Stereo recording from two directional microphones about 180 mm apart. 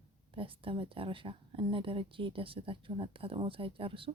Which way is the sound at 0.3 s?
30° right (ahead or behind).